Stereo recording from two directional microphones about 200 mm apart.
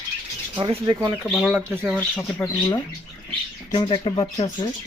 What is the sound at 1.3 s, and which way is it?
Speech, centre (ahead or behind).